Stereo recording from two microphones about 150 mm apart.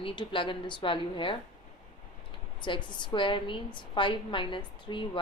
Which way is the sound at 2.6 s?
30° left (ahead or behind).